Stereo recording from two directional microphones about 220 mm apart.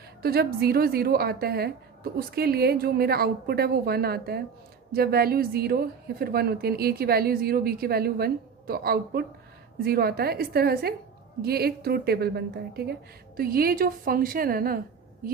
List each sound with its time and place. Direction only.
0.2 s a woman's voice: 45° right (ahead or behind)